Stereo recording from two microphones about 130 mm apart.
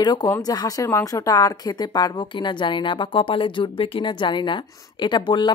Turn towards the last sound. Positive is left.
turn(degrees=35)  # may be behind; listen again after turning